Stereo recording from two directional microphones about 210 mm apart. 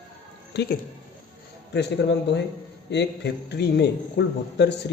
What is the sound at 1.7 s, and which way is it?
A man's voice, 55° left (ahead or behind).